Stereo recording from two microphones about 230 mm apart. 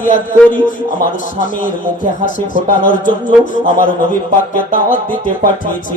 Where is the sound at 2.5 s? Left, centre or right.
Left.